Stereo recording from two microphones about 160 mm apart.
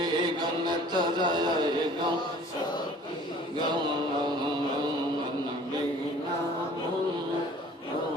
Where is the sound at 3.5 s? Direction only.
30° right (ahead or behind).